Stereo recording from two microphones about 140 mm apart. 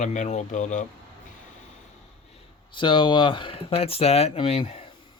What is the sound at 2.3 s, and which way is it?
Speech, 40° left (ahead or behind).